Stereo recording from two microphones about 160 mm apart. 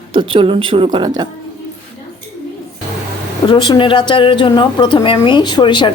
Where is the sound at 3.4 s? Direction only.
30° left (ahead or behind).